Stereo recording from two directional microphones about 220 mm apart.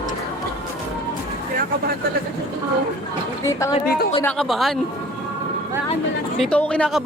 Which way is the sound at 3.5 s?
15° left (ahead or behind).